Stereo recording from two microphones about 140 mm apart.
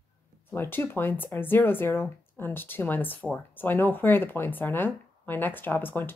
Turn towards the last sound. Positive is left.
turn(degrees=15)  # may be behind; listen again after turning